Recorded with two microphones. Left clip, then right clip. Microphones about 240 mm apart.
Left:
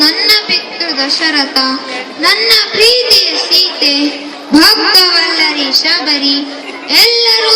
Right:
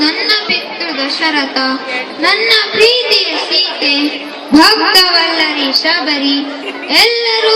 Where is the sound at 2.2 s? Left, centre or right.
Left.